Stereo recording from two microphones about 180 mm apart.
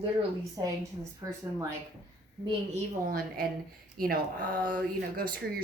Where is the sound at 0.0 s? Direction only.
25° right (ahead or behind).